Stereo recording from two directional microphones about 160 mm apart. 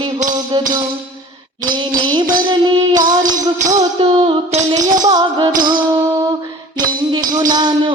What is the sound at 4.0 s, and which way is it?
Music, 30° right (ahead or behind).